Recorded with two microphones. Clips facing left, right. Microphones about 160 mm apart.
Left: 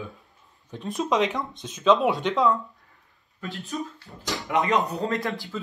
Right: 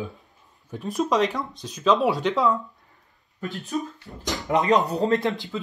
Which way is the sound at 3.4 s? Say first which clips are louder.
Right 3 dB; 40° right (ahead or behind).